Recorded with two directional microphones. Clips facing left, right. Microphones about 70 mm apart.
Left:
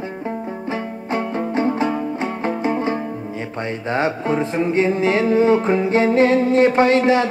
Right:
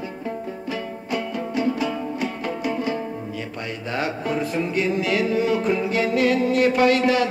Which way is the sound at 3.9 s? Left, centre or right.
Left.